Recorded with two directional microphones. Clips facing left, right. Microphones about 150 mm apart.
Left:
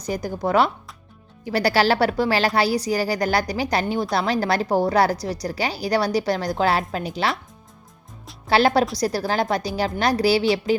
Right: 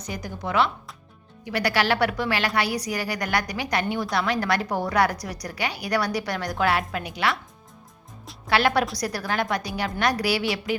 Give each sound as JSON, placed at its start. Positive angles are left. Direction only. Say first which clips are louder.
{"t": 0.0, "sound": "a woman's voice", "louder": "left 7 dB", "side_deg": 35}
{"t": 8.4, "sound": "a woman's voice", "louder": "left 4 dB", "side_deg": 30}